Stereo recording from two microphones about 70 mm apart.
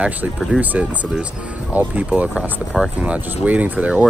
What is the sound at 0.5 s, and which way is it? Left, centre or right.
Speech, right.